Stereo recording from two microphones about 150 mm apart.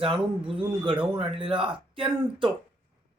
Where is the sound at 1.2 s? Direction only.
35° right (ahead or behind).